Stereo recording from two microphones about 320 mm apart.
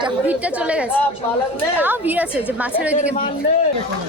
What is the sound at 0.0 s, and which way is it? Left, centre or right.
Speech, centre.